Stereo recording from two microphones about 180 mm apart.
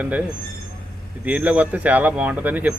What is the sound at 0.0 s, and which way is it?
Speech, 10° right (ahead or behind).